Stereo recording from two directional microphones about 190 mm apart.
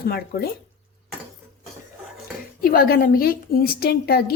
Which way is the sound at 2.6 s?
50° left (ahead or behind).